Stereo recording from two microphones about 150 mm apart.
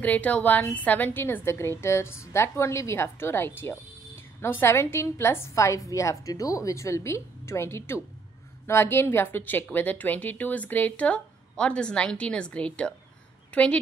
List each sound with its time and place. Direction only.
0.0 s a woman's voice: 10° left (ahead or behind)